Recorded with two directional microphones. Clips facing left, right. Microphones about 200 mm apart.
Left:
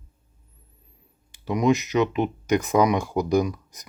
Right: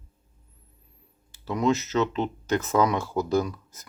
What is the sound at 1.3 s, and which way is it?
Speech, 15° left (ahead or behind).